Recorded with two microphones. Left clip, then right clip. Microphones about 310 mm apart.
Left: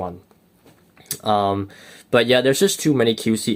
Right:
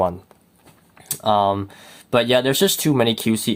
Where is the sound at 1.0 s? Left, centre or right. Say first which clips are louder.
Right 2 dB; centre.